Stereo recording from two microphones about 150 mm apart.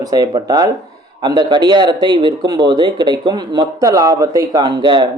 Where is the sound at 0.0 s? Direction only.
25° right (ahead or behind).